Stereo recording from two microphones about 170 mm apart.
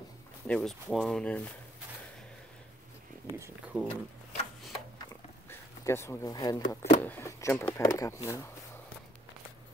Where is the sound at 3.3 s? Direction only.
10° right (ahead or behind).